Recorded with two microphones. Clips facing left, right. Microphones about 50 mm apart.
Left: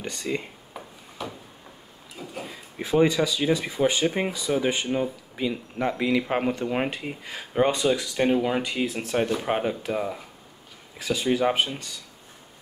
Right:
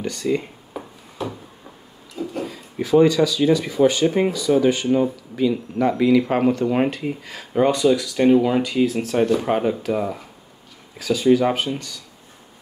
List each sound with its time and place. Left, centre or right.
0.0 s speech: centre
0.7 s a sound: centre
2.8 s speech: left; by 6.9 s centre
7.2 s speech: centre
8.3 s speech: centre
8.6 s speech: centre
9.1 s speech: centre
11.0 s speech: left